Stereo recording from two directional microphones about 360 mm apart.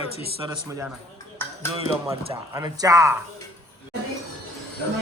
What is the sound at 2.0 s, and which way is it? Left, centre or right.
A man's voice, centre.